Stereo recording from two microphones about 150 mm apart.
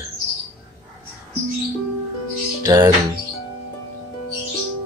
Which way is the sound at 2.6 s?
25° right (ahead or behind).